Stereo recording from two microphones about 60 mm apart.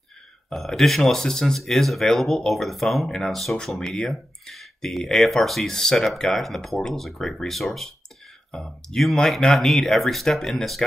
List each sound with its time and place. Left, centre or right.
0.5 s speech: centre